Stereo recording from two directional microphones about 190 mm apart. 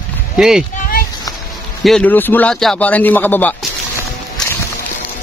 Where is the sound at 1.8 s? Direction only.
5° left (ahead or behind).